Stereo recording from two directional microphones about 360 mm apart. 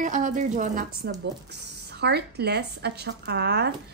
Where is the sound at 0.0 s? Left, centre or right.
Right.